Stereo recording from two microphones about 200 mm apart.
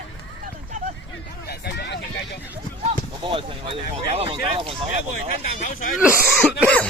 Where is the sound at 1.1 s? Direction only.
55° left (ahead or behind).